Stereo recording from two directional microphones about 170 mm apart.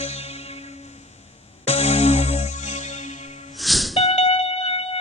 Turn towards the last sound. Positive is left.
turn(degrees=35)  # may be behind; listen again after turning